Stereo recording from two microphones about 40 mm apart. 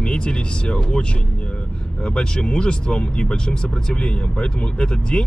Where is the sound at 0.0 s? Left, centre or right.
Left.